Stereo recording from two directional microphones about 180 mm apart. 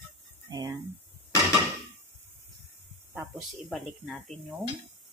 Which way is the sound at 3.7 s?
Centre (ahead or behind).